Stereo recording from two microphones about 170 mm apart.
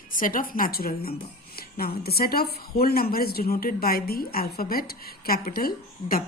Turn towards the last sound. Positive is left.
turn(degrees=60)  # may be behind; listen again after turning